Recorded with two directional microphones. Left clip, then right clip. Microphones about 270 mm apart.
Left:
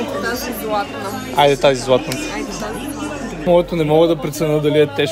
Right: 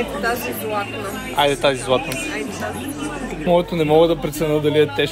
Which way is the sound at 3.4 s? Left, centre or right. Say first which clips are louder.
Left 2 dB; centre.